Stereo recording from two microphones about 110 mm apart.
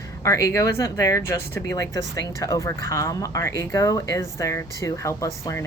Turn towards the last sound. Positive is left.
turn(degrees=30)  # may be behind; listen again after turning